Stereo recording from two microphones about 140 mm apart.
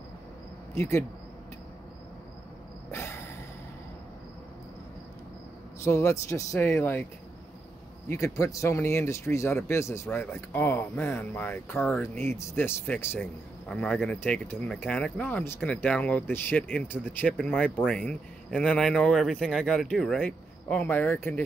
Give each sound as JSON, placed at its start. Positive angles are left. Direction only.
{"t": 0.7, "sound": "speech", "side_deg": 20}
{"t": 2.9, "sound": "a sound", "side_deg": 20}
{"t": 5.9, "sound": "speech", "side_deg": 20}
{"t": 8.1, "sound": "speech", "side_deg": 20}